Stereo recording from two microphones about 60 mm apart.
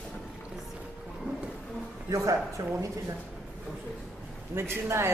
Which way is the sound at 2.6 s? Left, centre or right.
Right.